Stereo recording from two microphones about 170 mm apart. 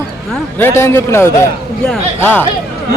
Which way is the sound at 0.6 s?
15° left (ahead or behind).